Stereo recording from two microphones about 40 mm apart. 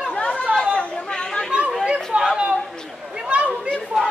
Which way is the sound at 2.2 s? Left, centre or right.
Right.